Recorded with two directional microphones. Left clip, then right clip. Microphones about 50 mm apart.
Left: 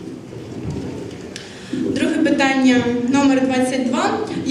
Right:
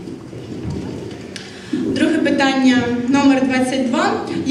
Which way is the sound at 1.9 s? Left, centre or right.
Left.